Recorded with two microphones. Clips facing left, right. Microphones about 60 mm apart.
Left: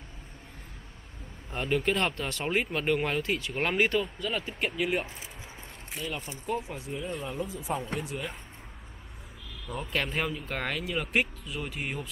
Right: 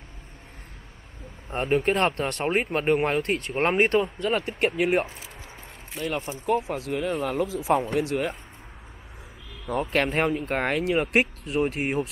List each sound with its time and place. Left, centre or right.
1.5 s speech: right
3.2 s speech: right
3.5 s speech: right
4.6 s speech: right
5.9 s speech: right
9.7 s speech: right
11.1 s speech: right
11.6 s speech: right